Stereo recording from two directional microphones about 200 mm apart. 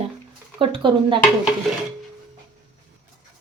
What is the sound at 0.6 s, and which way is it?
Speech, 25° right (ahead or behind).